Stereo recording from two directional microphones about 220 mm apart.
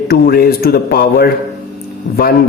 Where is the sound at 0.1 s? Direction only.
45° left (ahead or behind).